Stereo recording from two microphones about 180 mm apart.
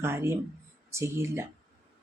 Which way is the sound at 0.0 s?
15° right (ahead or behind).